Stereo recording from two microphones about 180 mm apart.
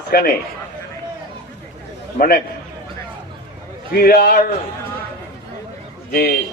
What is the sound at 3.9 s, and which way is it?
Speech, 55° left (ahead or behind).